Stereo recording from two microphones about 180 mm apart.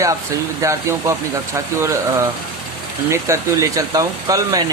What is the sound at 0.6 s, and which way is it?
Speech, 15° right (ahead or behind).